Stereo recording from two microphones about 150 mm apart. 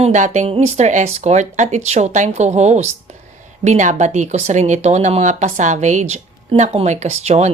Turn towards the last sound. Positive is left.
turn(degrees=-50)  # may be behind; listen again after turning